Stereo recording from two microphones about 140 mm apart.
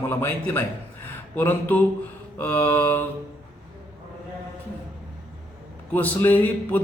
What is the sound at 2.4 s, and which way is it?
Speech, 15° left (ahead or behind).